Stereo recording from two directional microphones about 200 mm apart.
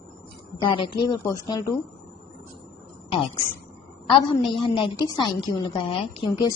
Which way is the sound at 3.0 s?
25° left (ahead or behind).